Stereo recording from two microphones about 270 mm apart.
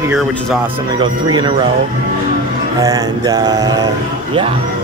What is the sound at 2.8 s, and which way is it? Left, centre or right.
Mantra, centre.